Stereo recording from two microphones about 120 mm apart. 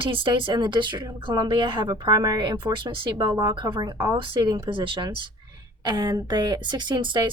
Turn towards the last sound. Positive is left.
turn(degrees=-40)  # may be behind; listen again after turning